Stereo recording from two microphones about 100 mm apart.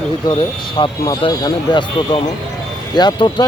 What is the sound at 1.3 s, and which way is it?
Speech, 40° left (ahead or behind).